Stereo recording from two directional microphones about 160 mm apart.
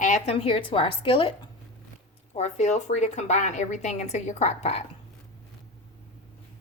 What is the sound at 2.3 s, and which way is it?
A woman's voice, 45° left (ahead or behind).